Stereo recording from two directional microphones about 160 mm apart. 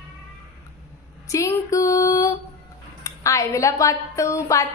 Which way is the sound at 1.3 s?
20° left (ahead or behind).